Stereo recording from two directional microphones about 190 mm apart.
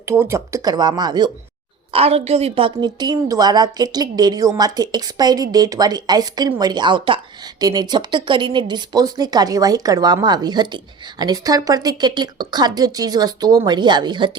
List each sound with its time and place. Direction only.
0.0 s a woman's voice: 15° right (ahead or behind)